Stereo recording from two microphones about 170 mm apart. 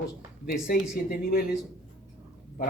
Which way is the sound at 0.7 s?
60° left (ahead or behind).